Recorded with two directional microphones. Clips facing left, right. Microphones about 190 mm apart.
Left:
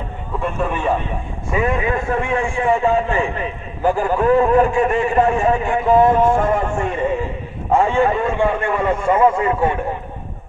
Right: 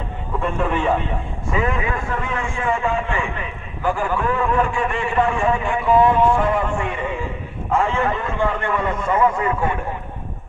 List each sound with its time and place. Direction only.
0.7 s a man's voice: 10° left (ahead or behind)
1.5 s a man's voice: 20° left (ahead or behind)